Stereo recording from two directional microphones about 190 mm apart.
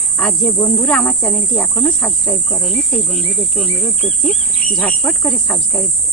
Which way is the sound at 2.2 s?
20° left (ahead or behind).